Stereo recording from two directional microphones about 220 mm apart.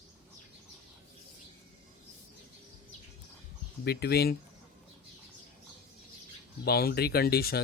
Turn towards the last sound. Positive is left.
turn(degrees=45)  # may be behind; listen again after turning